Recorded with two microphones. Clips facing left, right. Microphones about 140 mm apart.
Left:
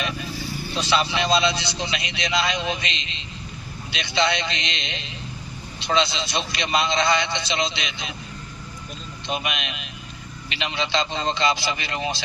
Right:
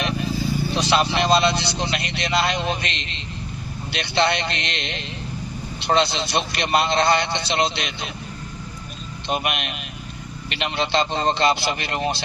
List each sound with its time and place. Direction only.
0.9 s a man's voice: 55° right (ahead or behind)
9.2 s a man's voice: 55° right (ahead or behind)